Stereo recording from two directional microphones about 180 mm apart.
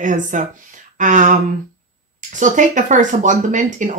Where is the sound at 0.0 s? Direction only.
45° right (ahead or behind).